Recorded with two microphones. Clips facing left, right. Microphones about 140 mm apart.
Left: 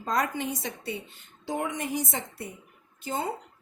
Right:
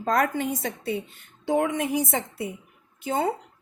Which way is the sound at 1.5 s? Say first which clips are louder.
Right 7 dB; 65° right (ahead or behind).